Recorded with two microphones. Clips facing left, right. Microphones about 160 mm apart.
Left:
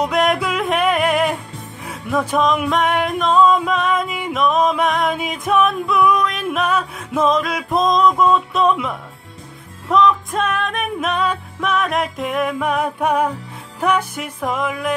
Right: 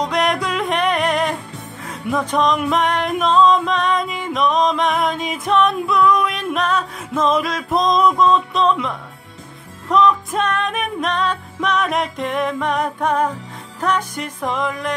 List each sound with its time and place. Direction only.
0.0 s music: 5° left (ahead or behind)
8.2 s a sound: 10° left (ahead or behind)
9.8 s music: centre (ahead or behind)